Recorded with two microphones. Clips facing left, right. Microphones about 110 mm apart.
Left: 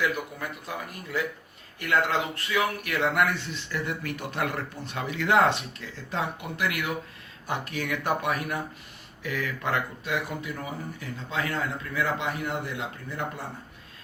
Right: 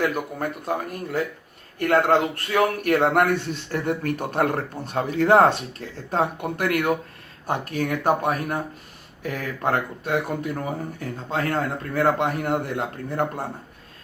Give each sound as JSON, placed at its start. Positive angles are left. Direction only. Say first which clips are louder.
{"t": 0.0, "sound": "speech", "louder": "right 5 dB", "side_deg": -45}